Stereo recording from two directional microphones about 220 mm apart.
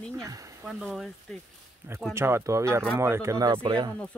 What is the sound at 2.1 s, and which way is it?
Speech, 10° right (ahead or behind).